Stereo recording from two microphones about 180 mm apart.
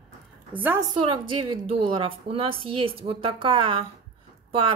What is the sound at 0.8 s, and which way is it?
Speech, 25° right (ahead or behind).